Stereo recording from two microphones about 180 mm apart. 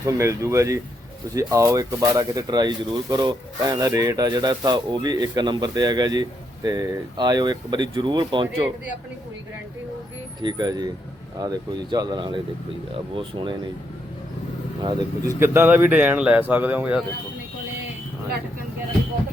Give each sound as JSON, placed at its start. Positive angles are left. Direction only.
{"t": 0.0, "sound": "speech", "side_deg": -15}
{"t": 10.4, "sound": "speech", "side_deg": -20}
{"t": 15.4, "sound": "speech", "side_deg": -15}